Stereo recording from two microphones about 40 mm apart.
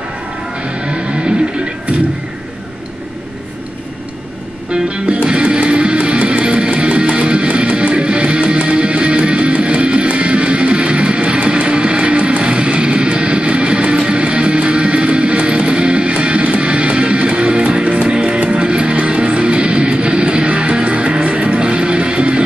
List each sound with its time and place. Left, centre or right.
4.8 s music: right
18.0 s music: right